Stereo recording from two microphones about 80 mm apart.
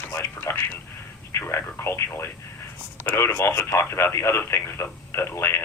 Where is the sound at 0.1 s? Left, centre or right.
Left.